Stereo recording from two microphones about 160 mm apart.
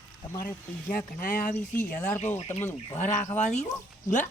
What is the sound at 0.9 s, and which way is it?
Speech, 60° left (ahead or behind).